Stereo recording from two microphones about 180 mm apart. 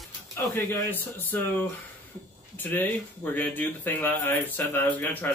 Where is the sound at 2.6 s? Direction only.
10° left (ahead or behind).